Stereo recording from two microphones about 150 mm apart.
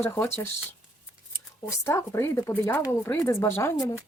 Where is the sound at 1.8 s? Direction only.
15° left (ahead or behind).